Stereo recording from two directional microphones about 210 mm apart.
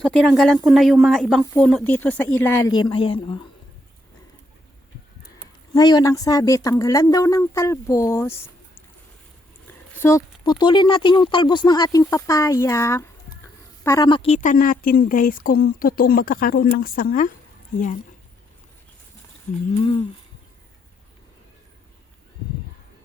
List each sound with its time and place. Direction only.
0.0 s speech: centre (ahead or behind); by 3.4 s 25° left (ahead or behind)
5.7 s speech: 20° left (ahead or behind)
9.9 s a woman's voice: 10° left (ahead or behind); by 17.9 s 40° left (ahead or behind)
19.7 s speech: 30° left (ahead or behind)